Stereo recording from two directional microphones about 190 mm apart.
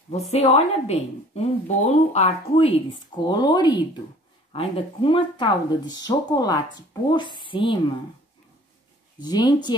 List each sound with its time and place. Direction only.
0.3 s a woman's voice: 35° left (ahead or behind)
9.2 s speech: 20° left (ahead or behind)